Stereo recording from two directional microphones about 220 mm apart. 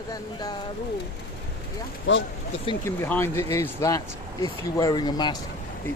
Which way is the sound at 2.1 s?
55° left (ahead or behind).